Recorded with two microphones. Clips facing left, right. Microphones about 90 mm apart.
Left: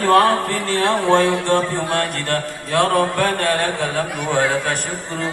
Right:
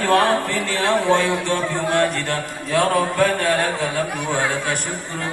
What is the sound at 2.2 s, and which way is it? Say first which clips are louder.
Speech: left 2 dB; 55° left (ahead or behind).